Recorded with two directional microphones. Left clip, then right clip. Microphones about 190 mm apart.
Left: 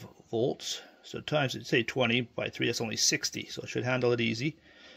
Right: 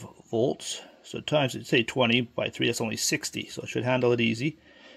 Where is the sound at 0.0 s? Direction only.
5° right (ahead or behind).